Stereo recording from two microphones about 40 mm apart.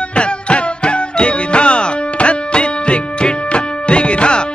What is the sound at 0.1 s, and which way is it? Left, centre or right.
Music, left.